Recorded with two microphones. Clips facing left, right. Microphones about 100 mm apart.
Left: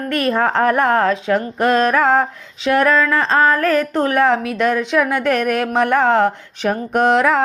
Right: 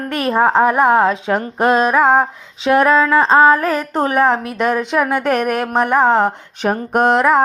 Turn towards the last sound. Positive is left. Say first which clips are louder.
# right 1 dB
turn(degrees=-40)  # may be behind; listen again after turning